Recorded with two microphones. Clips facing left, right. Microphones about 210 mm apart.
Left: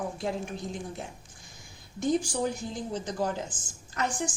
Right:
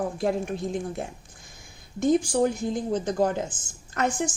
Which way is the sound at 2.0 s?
55° right (ahead or behind).